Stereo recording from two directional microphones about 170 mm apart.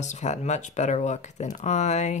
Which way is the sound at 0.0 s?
45° left (ahead or behind).